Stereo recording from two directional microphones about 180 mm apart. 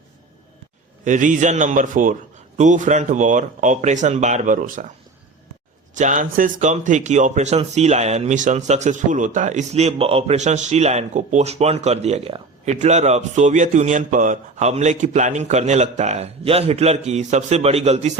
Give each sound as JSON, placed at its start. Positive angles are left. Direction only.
{"t": 1.0, "sound": "speech", "side_deg": -45}
{"t": 5.9, "sound": "speech", "side_deg": -45}